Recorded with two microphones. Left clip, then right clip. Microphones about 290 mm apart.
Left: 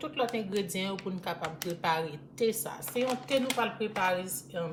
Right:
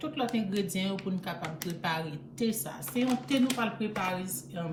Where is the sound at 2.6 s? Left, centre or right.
Centre.